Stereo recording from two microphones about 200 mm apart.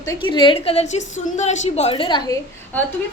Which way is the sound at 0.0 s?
20° left (ahead or behind).